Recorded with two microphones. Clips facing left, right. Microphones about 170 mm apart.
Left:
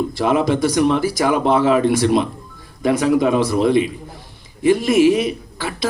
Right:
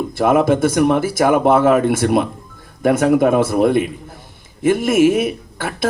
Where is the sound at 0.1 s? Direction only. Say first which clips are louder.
Right 8 dB; 50° right (ahead or behind).